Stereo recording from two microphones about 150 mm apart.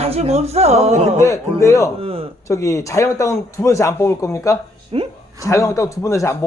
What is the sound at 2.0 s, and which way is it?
Speech, 40° right (ahead or behind).